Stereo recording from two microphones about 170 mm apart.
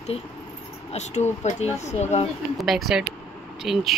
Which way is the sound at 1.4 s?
40° left (ahead or behind).